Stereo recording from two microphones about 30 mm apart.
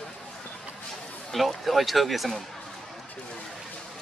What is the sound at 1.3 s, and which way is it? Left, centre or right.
Speech, centre.